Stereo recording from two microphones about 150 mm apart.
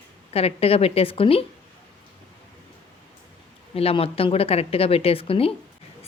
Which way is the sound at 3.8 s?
40° left (ahead or behind).